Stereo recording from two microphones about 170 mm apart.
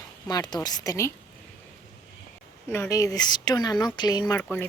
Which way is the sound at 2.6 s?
15° left (ahead or behind).